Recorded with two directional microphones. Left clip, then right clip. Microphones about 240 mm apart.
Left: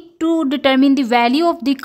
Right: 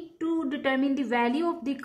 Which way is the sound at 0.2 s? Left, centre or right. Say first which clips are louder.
Left 12 dB; left.